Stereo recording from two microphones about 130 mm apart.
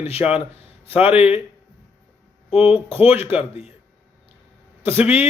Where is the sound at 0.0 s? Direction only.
50° left (ahead or behind).